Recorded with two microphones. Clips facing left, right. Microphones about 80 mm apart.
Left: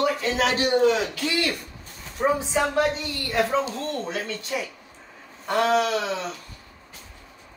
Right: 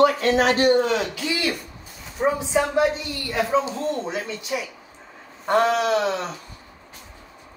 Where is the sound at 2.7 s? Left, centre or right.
Centre.